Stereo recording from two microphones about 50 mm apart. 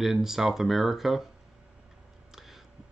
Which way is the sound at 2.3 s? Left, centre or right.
Centre.